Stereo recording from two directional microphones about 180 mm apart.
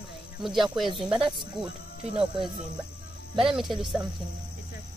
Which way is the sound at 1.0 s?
5° right (ahead or behind).